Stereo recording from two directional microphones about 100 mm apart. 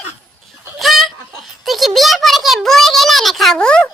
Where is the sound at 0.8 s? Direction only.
Centre (ahead or behind).